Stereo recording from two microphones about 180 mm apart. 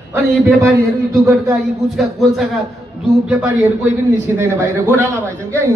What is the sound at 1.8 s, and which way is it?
A man's voice, centre (ahead or behind).